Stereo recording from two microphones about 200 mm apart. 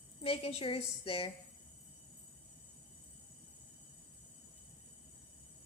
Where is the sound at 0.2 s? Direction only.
30° left (ahead or behind).